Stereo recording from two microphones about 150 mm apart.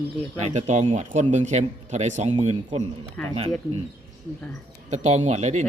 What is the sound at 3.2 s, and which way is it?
Speech, 10° left (ahead or behind).